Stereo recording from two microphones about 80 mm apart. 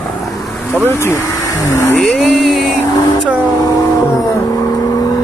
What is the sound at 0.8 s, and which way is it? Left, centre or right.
Speech, left.